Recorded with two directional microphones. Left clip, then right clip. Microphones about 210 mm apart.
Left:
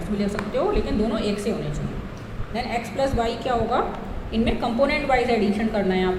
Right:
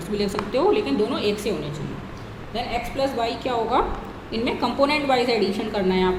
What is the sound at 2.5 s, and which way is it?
Speech, 5° right (ahead or behind).